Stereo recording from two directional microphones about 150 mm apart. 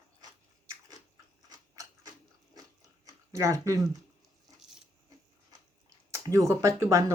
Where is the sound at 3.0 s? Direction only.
20° right (ahead or behind).